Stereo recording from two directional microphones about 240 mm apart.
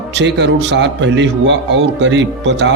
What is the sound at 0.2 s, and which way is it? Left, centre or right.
Speech, right.